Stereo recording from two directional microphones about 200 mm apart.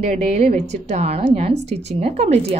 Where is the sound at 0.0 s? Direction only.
35° right (ahead or behind).